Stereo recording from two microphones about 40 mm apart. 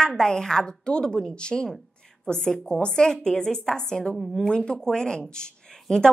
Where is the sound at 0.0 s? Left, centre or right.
Centre.